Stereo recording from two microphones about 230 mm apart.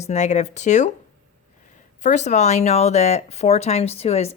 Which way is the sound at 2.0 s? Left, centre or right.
Left.